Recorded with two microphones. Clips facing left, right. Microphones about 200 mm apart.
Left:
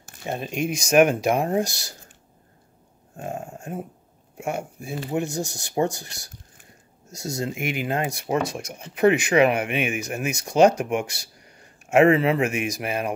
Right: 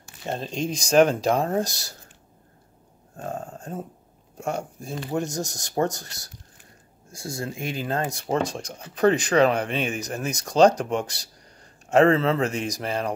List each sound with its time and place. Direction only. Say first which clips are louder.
0.3 s speech: left 1 dB; 10° left (ahead or behind)
3.2 s speech: even; 10° left (ahead or behind)